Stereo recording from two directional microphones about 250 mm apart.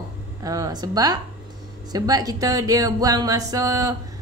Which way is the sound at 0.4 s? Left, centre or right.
Centre.